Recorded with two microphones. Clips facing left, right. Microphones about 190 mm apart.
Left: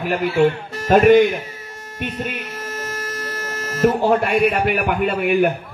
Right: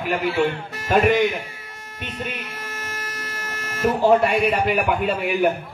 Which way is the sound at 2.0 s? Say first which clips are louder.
Left 5 dB; 45° left (ahead or behind).